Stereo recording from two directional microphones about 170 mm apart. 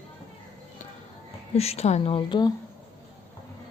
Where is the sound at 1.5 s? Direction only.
35° left (ahead or behind).